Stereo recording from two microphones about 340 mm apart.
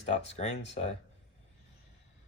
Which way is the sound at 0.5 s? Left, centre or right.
Left.